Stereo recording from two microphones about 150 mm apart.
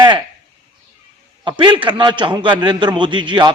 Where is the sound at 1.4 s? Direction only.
30° right (ahead or behind).